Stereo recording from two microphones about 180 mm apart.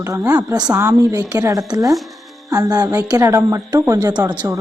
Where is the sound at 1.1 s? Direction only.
20° right (ahead or behind).